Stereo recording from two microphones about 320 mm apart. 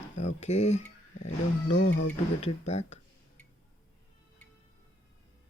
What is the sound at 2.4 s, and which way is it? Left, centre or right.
Speech, centre.